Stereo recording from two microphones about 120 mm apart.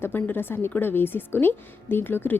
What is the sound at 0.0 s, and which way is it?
A woman's voice, 15° left (ahead or behind).